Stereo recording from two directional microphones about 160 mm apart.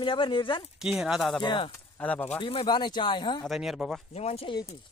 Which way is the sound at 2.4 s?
30° left (ahead or behind).